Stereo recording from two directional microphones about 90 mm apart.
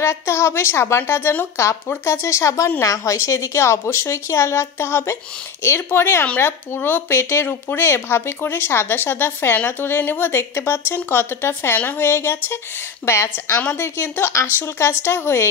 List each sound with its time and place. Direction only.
0.0 s a woman's voice: 30° left (ahead or behind)